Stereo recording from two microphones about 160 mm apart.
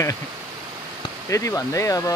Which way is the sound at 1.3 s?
20° left (ahead or behind).